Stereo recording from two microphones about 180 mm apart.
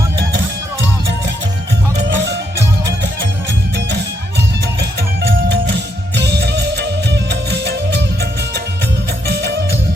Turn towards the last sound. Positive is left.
turn(degrees=-70)  # may be behind; listen again after turning